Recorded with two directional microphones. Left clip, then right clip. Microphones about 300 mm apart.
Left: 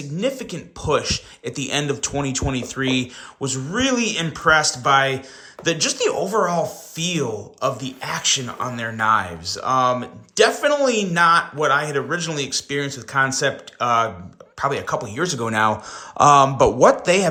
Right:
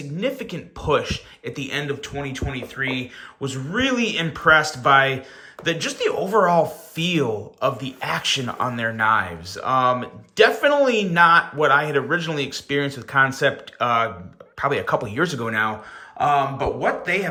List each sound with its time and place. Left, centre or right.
0.2 s speech: centre